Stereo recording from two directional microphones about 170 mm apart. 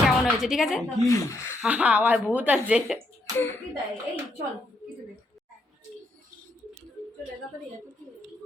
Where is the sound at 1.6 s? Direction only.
5° right (ahead or behind).